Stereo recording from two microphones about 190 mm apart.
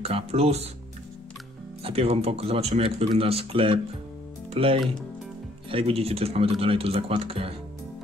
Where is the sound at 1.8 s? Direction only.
30° right (ahead or behind).